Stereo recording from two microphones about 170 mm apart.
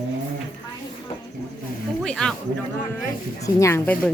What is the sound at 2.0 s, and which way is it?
Speech, 5° left (ahead or behind).